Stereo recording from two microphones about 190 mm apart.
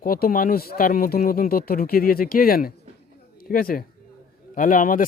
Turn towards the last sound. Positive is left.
turn(degrees=45)  # may be behind; listen again after turning